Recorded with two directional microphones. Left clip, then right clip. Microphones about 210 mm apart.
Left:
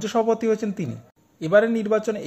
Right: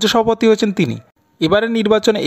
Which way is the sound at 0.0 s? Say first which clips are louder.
Right 8 dB; 40° right (ahead or behind).